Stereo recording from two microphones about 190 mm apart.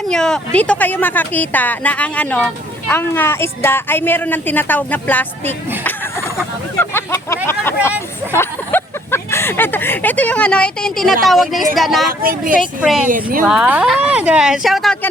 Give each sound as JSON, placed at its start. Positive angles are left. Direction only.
{"t": 0.1, "sound": "speech", "side_deg": 5}
{"t": 5.8, "sound": "a sound", "side_deg": 10}
{"t": 7.4, "sound": "speech", "side_deg": 10}
{"t": 12.2, "sound": "speech", "side_deg": -45}
{"t": 12.8, "sound": "speech", "side_deg": -5}
{"t": 13.1, "sound": "speech", "side_deg": -45}
{"t": 13.4, "sound": "speech", "side_deg": -5}